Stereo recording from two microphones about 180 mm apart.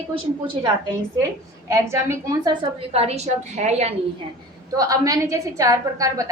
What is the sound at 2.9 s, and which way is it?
A woman's voice, 35° right (ahead or behind).